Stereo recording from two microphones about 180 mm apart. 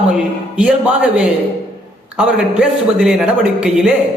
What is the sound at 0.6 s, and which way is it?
A man's voice, 5° right (ahead or behind).